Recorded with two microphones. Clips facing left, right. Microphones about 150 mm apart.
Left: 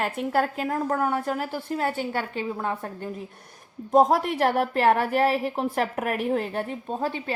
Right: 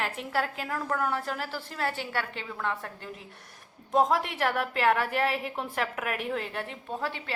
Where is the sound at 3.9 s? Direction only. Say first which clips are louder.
Left 6 dB; 40° left (ahead or behind).